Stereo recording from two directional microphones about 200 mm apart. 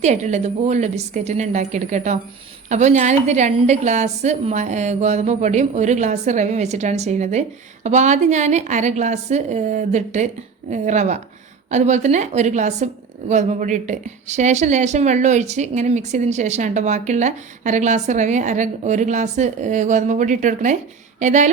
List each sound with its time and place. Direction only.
0.0 s a woman's voice: 35° right (ahead or behind)